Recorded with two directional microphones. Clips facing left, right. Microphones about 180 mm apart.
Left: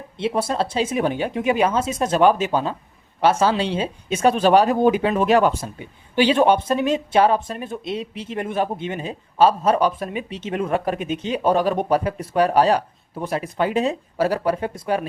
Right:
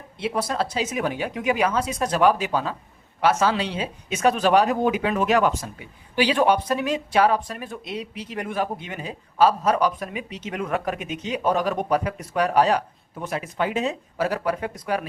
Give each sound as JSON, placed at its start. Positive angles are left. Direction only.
{"t": 0.2, "sound": "speech", "side_deg": 25}